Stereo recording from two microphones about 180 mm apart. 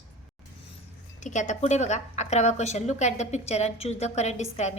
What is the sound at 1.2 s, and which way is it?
A woman's voice, 40° left (ahead or behind).